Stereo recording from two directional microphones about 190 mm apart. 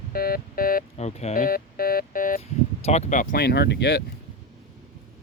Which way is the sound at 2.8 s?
35° left (ahead or behind).